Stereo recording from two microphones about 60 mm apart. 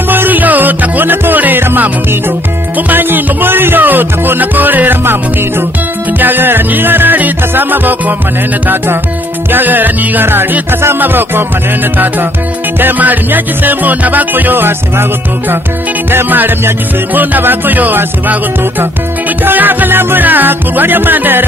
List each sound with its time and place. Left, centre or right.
0.1 s music: right
9.5 s music: right
12.7 s music: right
16.1 s music: right